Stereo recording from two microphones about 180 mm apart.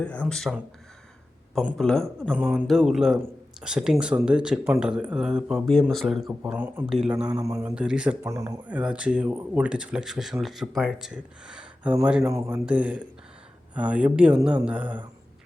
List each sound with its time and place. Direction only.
0.0 s speech: 5° left (ahead or behind)
6.4 s speech: 10° right (ahead or behind)
8.3 s speech: 20° right (ahead or behind)
8.6 s speech: 5° right (ahead or behind)
12.2 s speech: 15° right (ahead or behind)